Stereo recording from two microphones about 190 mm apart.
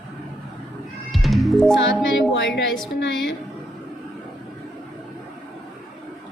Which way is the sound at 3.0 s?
75° left (ahead or behind).